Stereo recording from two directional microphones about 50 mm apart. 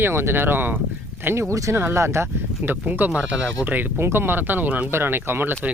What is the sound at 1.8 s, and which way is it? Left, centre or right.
Speech, right.